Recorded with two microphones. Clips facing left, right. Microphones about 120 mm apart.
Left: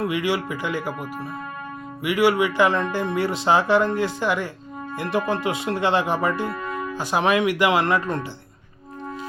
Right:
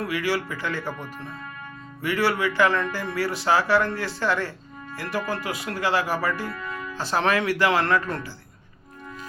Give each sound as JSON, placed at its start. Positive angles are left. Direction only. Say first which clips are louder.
{"t": 0.0, "sound": "speech", "louder": "left 3 dB", "side_deg": 20}